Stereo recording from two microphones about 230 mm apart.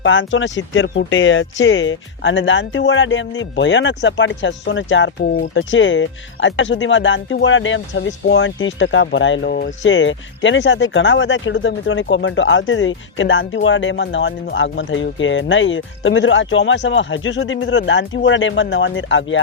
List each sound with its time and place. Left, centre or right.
0.0 s speech: left